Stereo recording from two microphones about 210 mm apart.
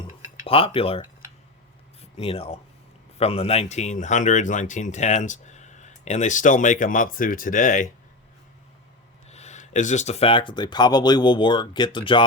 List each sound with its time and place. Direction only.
0.4 s speech: 25° left (ahead or behind)
9.3 s speech: 30° left (ahead or behind)